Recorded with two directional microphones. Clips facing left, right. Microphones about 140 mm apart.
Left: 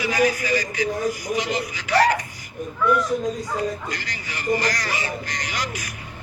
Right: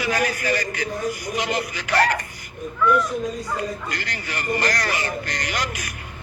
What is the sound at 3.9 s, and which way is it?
A man's voice, 60° right (ahead or behind).